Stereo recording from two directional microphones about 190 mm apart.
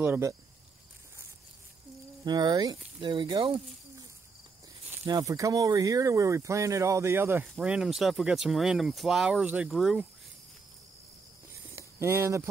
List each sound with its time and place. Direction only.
0.0 s speech: 10° right (ahead or behind)
2.2 s speech: 20° right (ahead or behind)
5.0 s speech: 20° right (ahead or behind); by 10.0 s centre (ahead or behind)
11.7 s a sound: 15° right (ahead or behind)